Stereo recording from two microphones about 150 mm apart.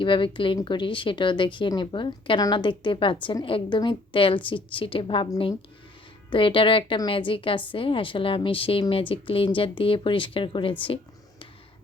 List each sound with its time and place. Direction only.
0.0 s speech: 35° left (ahead or behind)
6.3 s speech: 35° left (ahead or behind)